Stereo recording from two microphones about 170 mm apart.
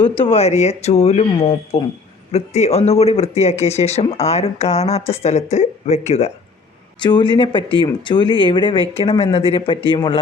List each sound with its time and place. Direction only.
0.0 s speech: 10° left (ahead or behind)
0.3 s speech: 40° left (ahead or behind)
7.0 s speech: 25° left (ahead or behind)